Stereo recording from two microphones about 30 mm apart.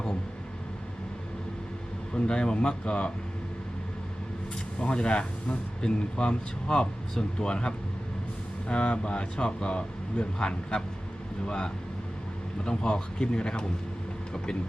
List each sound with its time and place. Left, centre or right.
2.1 s speech: left
4.8 s speech: left